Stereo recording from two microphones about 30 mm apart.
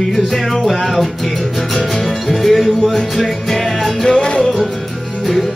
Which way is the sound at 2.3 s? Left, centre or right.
Centre.